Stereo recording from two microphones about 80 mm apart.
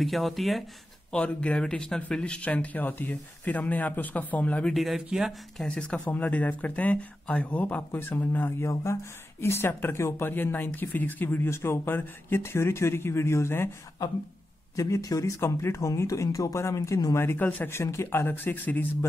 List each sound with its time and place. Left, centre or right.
0.0 s speech: centre
1.1 s speech: centre
4.6 s speech: centre
5.6 s speech: centre; by 13.7 s left
14.8 s speech: left
15.4 s speech: left
18.2 s speech: left